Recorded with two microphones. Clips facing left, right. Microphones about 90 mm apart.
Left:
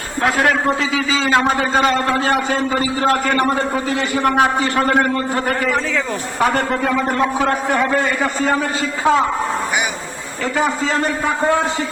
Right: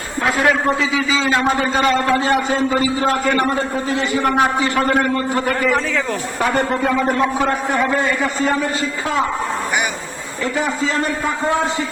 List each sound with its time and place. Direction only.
2.2 s a man's voice: 45° left (ahead or behind)
3.8 s speech: 65° left (ahead or behind)
4.9 s a man's voice: 35° left (ahead or behind)